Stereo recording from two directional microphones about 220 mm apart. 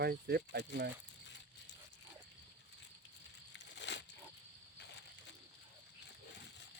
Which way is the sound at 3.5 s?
55° left (ahead or behind).